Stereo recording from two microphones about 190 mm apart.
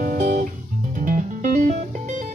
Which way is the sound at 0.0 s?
45° right (ahead or behind).